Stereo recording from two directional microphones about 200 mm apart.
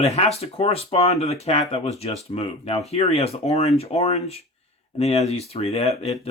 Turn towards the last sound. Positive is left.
turn(degrees=30)  # may be behind; listen again after turning